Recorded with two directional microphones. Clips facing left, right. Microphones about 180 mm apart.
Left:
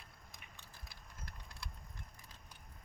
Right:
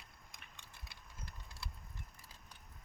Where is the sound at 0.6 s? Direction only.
Centre (ahead or behind).